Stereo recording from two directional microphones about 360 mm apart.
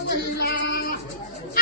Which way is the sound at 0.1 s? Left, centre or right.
Left.